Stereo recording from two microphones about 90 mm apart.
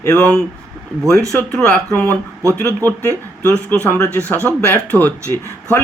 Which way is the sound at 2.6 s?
20° left (ahead or behind).